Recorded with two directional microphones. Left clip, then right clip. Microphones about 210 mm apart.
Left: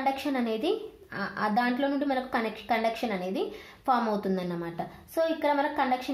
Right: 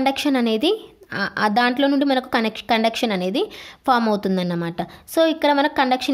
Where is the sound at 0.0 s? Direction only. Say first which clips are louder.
Right 9 dB; 50° right (ahead or behind).